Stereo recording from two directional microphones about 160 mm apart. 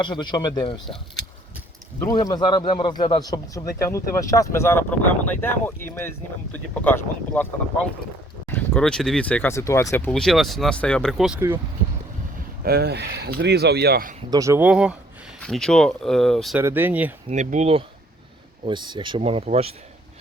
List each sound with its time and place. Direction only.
0.0 s a man's voice: 30° left (ahead or behind)
2.0 s a man's voice: 25° left (ahead or behind)
8.4 s speech: 10° left (ahead or behind)
10.2 s speech: centre (ahead or behind)
11.3 s speech: 15° right (ahead or behind)
12.6 s speech: 85° right; by 14.2 s 70° right (ahead or behind)
14.3 s speech: 20° right (ahead or behind)
14.7 s speech: 5° right (ahead or behind)
16.6 s speech: 10° right (ahead or behind)
17.2 s speech: 50° right (ahead or behind)
18.6 s speech: 30° right (ahead or behind)